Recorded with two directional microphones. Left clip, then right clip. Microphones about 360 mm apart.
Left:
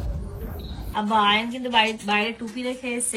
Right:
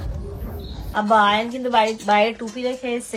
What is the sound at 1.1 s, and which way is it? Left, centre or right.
A woman's voice, centre.